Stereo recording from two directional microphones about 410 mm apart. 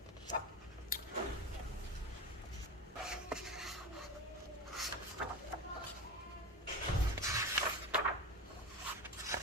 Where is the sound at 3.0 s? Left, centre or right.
Centre.